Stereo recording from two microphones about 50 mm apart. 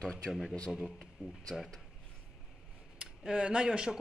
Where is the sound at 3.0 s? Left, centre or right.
Centre.